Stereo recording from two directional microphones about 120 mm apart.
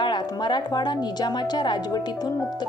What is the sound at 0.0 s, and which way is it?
Speech, 40° left (ahead or behind).